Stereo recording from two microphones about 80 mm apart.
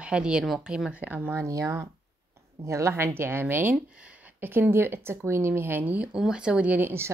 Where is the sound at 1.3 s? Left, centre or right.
Right; by 6.9 s centre.